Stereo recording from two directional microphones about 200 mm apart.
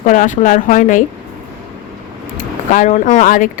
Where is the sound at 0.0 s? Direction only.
40° left (ahead or behind).